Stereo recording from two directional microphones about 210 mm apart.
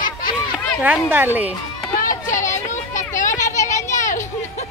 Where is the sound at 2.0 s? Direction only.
40° left (ahead or behind).